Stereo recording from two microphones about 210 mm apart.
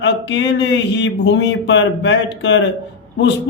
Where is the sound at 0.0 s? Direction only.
60° left (ahead or behind).